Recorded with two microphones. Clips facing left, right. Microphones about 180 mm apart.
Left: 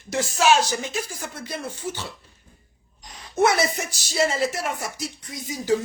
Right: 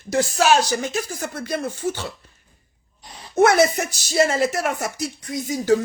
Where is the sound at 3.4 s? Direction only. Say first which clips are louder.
Right 5 dB; 55° right (ahead or behind).